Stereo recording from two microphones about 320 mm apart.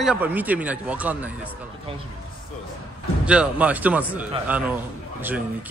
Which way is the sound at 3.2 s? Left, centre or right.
Centre.